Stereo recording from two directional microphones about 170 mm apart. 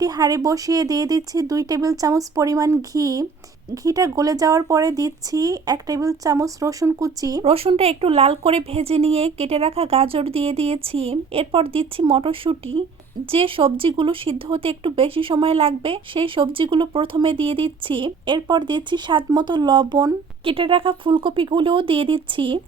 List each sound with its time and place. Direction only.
0.0 s speech: 20° right (ahead or behind)
7.4 s speech: 35° right (ahead or behind)